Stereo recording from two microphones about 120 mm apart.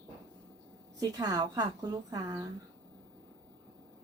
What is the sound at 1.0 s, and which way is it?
A woman's voice, 35° right (ahead or behind).